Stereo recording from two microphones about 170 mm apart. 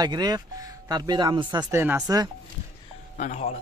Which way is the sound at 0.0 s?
25° right (ahead or behind).